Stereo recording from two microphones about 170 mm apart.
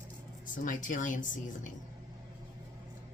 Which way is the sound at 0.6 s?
50° left (ahead or behind).